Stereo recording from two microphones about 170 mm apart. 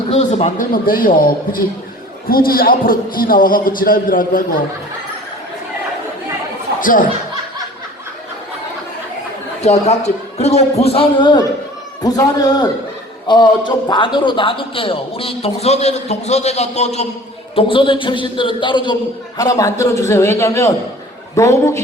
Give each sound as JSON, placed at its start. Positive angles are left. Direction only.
{"t": 0.1, "sound": "a man's voice", "side_deg": 40}
{"t": 6.7, "sound": "a sound", "side_deg": 55}
{"t": 9.6, "sound": "a man's voice", "side_deg": 40}